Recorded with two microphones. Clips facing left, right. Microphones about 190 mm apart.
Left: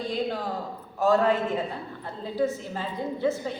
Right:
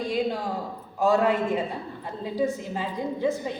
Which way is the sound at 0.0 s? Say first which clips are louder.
Right 2 dB; 10° right (ahead or behind).